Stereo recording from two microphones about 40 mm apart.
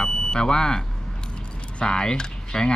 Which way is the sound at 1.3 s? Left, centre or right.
Left.